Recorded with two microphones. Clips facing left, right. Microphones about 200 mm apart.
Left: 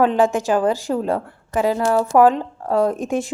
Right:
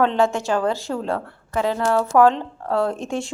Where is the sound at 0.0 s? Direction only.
15° left (ahead or behind).